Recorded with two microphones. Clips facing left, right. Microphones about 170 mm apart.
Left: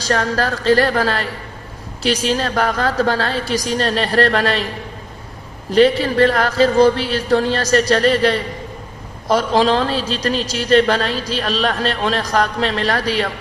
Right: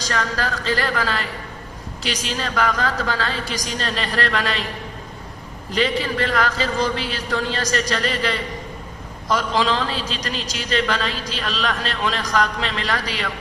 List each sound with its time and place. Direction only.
0.1 s a woman's voice: 40° left (ahead or behind)
5.7 s a woman's voice: 40° left (ahead or behind)